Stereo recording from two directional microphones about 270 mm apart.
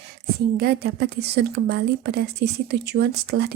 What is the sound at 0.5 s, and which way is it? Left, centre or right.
Speech, right.